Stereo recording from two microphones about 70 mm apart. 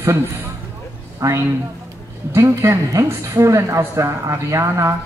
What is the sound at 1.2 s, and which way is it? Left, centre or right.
A woman's voice, right.